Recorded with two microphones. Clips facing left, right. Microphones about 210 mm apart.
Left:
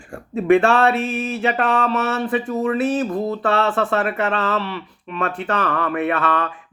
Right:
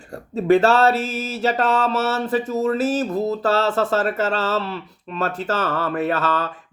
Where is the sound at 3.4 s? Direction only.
40° right (ahead or behind).